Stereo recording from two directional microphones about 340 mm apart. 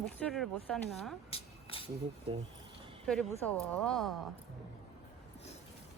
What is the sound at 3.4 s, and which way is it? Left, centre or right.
Speech, centre.